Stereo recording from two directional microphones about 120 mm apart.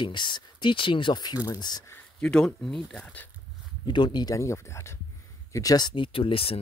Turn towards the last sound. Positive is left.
turn(degrees=50)  # may be behind; listen again after turning